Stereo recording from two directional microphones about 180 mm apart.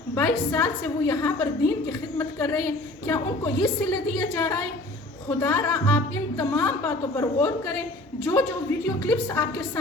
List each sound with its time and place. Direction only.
0.1 s a woman's voice: 10° left (ahead or behind)
5.4 s a woman's voice: 15° left (ahead or behind)